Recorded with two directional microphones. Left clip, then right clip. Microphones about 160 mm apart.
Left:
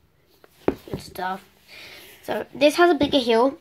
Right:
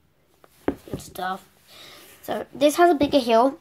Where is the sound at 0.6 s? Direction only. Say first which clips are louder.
Left 3 dB; centre (ahead or behind).